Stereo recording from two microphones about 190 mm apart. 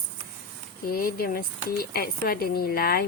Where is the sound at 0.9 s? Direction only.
50° left (ahead or behind).